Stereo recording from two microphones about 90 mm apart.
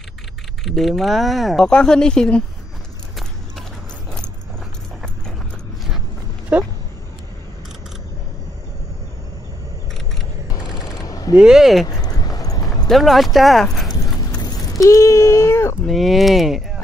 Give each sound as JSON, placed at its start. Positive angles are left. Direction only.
{"t": 0.7, "sound": "speech", "side_deg": 0}
{"t": 6.5, "sound": "speech", "side_deg": -15}
{"t": 10.5, "sound": "a sound", "side_deg": 45}
{"t": 11.3, "sound": "speech", "side_deg": -5}
{"t": 11.9, "sound": "clip-clop", "side_deg": 45}
{"t": 12.8, "sound": "speech", "side_deg": 0}
{"t": 14.4, "sound": "a sound", "side_deg": 50}
{"t": 14.9, "sound": "speech", "side_deg": 30}
{"t": 15.9, "sound": "speech", "side_deg": 0}